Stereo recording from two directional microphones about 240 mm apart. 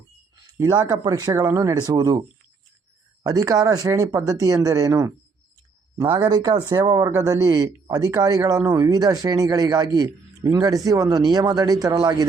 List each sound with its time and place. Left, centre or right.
0.5 s speech: centre
3.2 s speech: centre